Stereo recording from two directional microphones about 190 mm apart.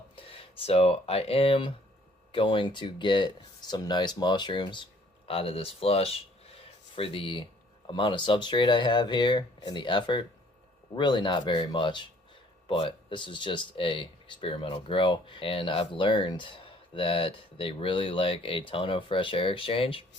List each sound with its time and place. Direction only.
0.2 s speech: 30° left (ahead or behind)